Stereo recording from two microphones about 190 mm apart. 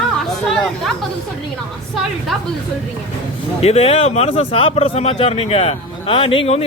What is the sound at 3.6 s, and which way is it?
Speech, 35° left (ahead or behind).